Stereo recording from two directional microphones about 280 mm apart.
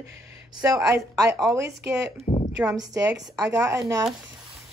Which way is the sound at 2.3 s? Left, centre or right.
Centre.